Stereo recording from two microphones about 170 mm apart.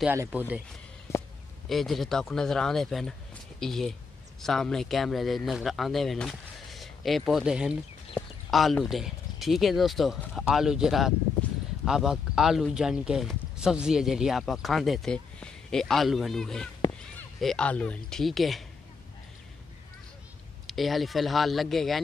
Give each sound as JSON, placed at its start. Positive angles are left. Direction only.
{"t": 0.1, "sound": "speech", "side_deg": -10}
{"t": 1.7, "sound": "speech", "side_deg": 0}
{"t": 16.8, "sound": "a sound", "side_deg": 25}
{"t": 17.4, "sound": "speech", "side_deg": 5}
{"t": 20.6, "sound": "speech", "side_deg": 0}